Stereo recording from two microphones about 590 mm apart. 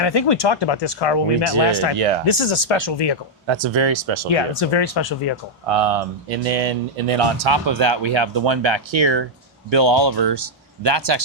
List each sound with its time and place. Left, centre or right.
0.0 s speech: left
2.2 s speech: left
3.4 s speech: right
4.4 s speech: left
5.6 s speech: right